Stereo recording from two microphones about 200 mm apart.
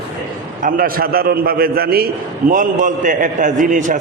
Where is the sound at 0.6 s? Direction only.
45° right (ahead or behind).